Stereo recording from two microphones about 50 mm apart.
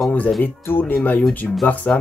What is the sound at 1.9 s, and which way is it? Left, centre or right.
Speech, left.